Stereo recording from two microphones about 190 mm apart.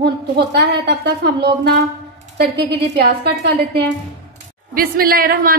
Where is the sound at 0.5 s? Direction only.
60° right (ahead or behind).